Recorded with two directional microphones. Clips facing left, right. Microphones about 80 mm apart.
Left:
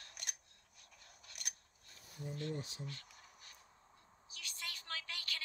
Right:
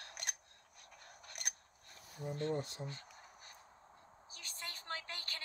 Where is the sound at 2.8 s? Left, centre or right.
Right.